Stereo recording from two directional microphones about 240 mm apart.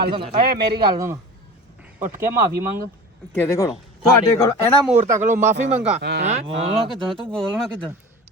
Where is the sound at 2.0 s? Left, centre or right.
Right.